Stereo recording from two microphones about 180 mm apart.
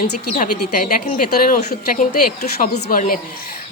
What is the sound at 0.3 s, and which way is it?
A woman's voice, 50° left (ahead or behind).